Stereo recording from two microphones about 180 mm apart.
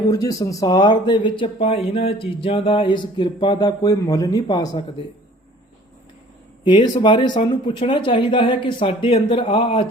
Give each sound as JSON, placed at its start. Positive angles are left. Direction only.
{"t": 0.1, "sound": "speech", "side_deg": 20}
{"t": 6.7, "sound": "speech", "side_deg": 25}